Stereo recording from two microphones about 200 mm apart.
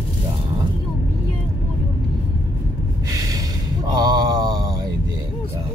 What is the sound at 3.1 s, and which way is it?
Gasp, 15° right (ahead or behind).